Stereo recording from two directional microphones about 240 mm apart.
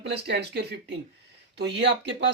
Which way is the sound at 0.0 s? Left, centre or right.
Right.